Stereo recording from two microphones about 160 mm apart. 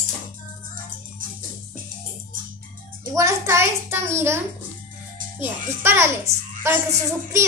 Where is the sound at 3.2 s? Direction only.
20° right (ahead or behind).